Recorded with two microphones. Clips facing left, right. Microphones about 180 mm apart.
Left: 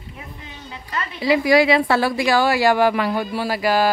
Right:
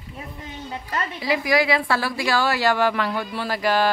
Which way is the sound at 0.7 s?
40° right (ahead or behind).